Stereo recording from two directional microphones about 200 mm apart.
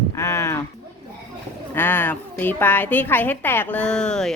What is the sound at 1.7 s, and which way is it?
A woman's voice, 10° left (ahead or behind).